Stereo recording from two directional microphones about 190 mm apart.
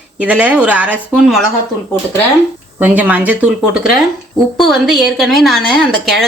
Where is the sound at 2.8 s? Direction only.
10° right (ahead or behind).